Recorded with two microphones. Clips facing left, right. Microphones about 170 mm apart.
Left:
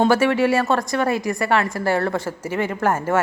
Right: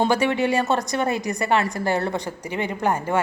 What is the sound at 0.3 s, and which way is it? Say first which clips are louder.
Speech: left 3 dB; 20° right (ahead or behind).